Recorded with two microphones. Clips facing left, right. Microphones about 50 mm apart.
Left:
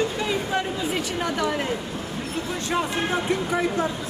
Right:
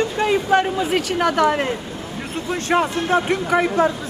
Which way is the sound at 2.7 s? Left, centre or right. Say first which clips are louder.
Right 7 dB; right.